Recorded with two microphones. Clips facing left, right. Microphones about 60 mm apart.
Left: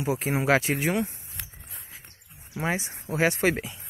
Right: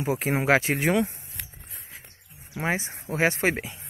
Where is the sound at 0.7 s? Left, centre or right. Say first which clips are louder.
Right 3 dB; right.